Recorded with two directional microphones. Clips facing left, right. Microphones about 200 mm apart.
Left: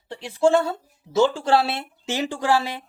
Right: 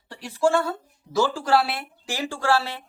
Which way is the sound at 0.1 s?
25° left (ahead or behind).